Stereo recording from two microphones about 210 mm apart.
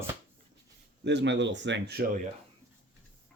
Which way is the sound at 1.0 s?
55° right (ahead or behind).